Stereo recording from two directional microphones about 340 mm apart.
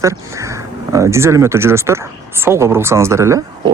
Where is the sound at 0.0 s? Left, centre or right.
Centre.